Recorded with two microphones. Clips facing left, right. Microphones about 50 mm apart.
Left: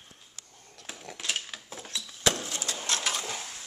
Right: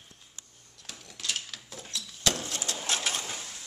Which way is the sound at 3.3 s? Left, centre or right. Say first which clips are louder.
Left 2 dB; centre.